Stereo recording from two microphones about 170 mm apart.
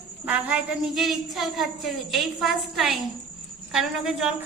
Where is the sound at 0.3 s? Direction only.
10° right (ahead or behind).